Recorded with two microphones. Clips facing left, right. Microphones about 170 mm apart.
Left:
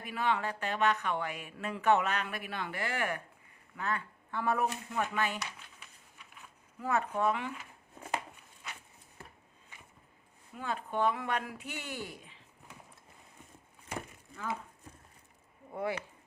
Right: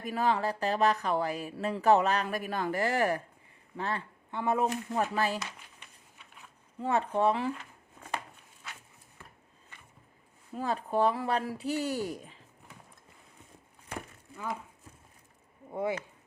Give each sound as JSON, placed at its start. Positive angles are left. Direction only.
{"t": 0.0, "sound": "speech", "side_deg": -40}
{"t": 4.3, "sound": "speech", "side_deg": -20}
{"t": 4.7, "sound": "speech", "side_deg": -35}
{"t": 6.7, "sound": "speech", "side_deg": -30}
{"t": 10.5, "sound": "speech", "side_deg": -35}
{"t": 15.7, "sound": "speech", "side_deg": -20}